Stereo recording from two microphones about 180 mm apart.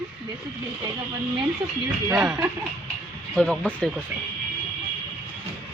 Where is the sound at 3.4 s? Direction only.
5° left (ahead or behind).